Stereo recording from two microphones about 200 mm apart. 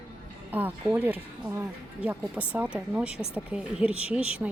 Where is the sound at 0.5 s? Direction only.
10° right (ahead or behind).